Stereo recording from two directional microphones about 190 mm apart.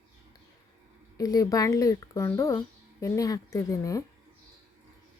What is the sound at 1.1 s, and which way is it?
Speech, 20° left (ahead or behind).